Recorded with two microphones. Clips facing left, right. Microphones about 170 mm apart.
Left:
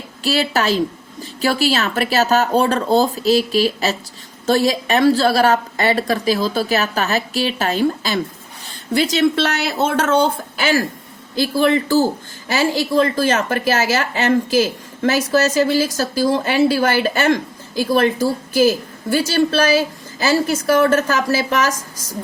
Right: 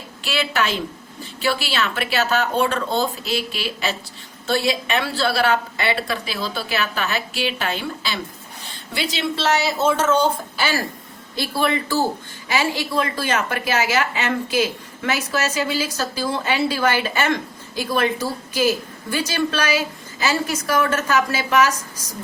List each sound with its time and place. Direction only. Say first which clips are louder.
0.2 s a woman's voice: left 4 dB; 40° left (ahead or behind)
9.3 s speech: left 1 dB; 60° left (ahead or behind)
12.5 s a woman's voice: left 4 dB; 45° left (ahead or behind)